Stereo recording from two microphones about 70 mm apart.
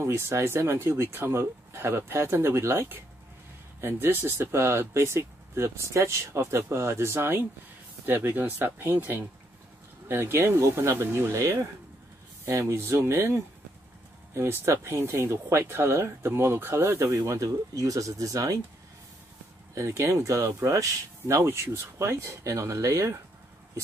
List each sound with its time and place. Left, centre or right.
0.0 s speech: right
11.3 s speech: right
17.4 s speech: right
19.7 s speech: right